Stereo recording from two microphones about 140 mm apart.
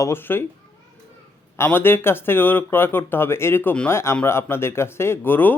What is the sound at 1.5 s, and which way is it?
Speech, 15° left (ahead or behind).